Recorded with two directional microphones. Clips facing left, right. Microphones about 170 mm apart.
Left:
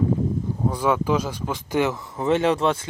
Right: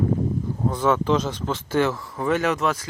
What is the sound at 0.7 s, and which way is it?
Speech, 10° left (ahead or behind).